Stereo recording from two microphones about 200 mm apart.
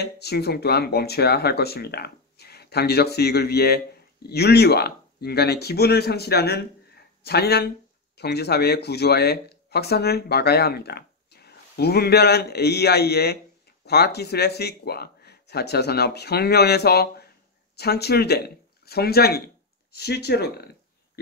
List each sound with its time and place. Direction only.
0.0 s speech: 55° left (ahead or behind)